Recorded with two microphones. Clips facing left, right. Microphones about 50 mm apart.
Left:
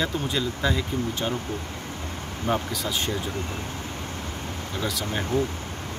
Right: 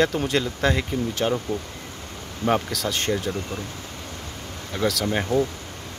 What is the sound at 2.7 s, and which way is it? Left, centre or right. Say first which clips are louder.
Speech: right 3 dB; right.